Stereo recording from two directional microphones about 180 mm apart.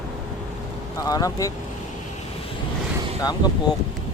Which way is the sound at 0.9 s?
20° left (ahead or behind).